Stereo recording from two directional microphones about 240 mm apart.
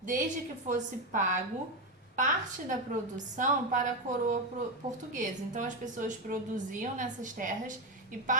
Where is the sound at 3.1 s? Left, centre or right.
Right.